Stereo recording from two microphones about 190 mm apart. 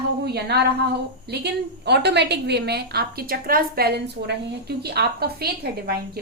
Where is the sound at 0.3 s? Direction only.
60° right (ahead or behind).